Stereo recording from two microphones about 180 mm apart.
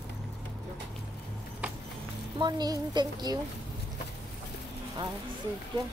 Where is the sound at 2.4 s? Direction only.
25° right (ahead or behind).